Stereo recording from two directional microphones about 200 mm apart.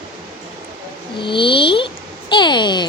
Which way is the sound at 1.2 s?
25° left (ahead or behind).